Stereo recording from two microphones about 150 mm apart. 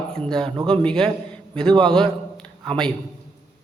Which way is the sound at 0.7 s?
5° left (ahead or behind).